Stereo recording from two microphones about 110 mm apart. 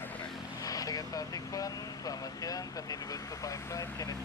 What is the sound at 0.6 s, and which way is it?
Vehicle, 35° left (ahead or behind).